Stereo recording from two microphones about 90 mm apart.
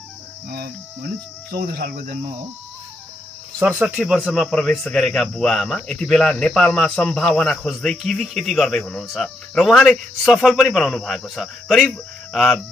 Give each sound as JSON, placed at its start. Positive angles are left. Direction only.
{"t": 3.6, "sound": "speech", "side_deg": -15}
{"t": 4.0, "sound": "speech", "side_deg": -5}